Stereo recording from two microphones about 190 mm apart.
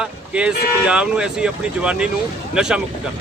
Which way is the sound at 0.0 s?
5° right (ahead or behind).